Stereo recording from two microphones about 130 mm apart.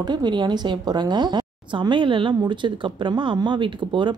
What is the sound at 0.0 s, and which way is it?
A woman's voice, 35° right (ahead or behind).